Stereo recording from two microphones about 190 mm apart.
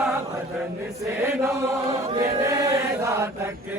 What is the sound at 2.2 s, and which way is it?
Chant, 15° right (ahead or behind).